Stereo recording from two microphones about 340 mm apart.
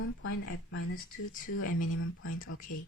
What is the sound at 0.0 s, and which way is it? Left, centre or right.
Speech, left.